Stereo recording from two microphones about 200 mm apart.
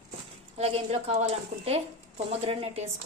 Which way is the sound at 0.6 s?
30° right (ahead or behind).